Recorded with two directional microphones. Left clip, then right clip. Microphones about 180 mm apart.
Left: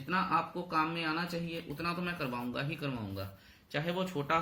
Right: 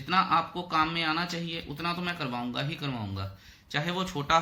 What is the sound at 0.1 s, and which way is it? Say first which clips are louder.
Speech: right 6 dB; 25° right (ahead or behind).